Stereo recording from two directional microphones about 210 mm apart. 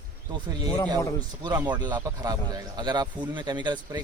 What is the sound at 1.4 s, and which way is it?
Speech, 20° right (ahead or behind).